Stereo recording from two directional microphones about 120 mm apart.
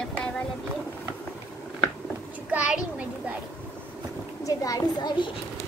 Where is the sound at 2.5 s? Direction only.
10° right (ahead or behind).